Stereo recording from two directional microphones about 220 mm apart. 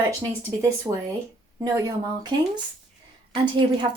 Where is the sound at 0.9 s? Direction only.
15° right (ahead or behind).